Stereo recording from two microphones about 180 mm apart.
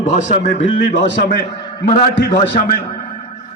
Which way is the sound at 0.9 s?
60° left (ahead or behind).